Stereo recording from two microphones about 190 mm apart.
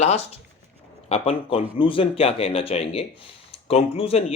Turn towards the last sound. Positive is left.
turn(degrees=30)  # may be behind; listen again after turning